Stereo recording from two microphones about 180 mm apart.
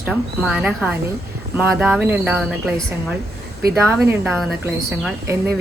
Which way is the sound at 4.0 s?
Centre (ahead or behind).